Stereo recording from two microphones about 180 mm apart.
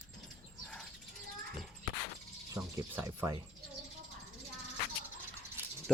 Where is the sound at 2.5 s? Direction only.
15° right (ahead or behind).